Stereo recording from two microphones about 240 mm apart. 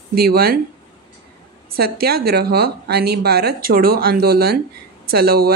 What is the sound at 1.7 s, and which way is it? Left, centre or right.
A woman's voice, right.